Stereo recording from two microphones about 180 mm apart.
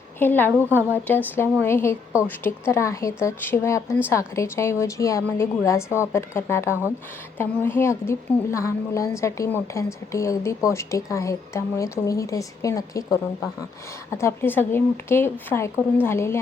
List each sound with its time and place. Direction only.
0.2 s a woman's voice: 10° left (ahead or behind)
0.5 s a woman's voice: 10° right (ahead or behind)
0.9 s a woman's voice: 10° left (ahead or behind)